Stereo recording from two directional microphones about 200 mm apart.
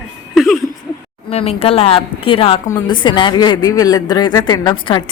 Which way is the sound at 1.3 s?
30° left (ahead or behind).